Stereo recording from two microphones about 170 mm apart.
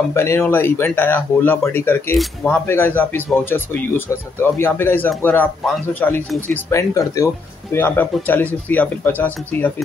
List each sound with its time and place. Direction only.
0.1 s speech: 15° left (ahead or behind)